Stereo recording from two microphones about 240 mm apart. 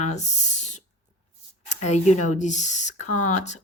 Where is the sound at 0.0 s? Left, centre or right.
Left.